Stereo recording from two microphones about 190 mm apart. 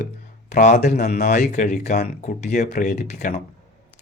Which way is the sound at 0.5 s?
40° left (ahead or behind).